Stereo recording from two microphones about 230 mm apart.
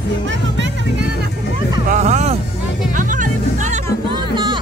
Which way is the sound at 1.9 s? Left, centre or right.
Right.